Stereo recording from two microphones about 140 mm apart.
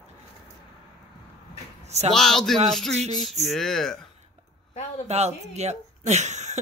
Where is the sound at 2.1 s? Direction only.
5° left (ahead or behind).